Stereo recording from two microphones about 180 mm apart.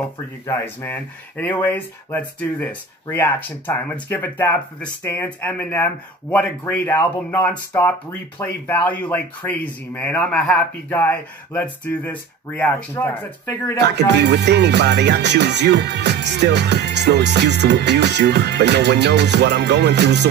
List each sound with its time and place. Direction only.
0.5 s speech: 10° left (ahead or behind)
13.7 s music: 70° right (ahead or behind)